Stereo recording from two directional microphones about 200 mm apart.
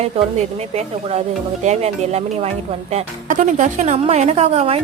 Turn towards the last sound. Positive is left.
turn(degrees=-30)  # may be behind; listen again after turning